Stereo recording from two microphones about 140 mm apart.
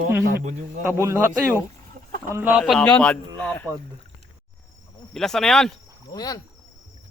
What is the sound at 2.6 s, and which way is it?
Speech, centre (ahead or behind).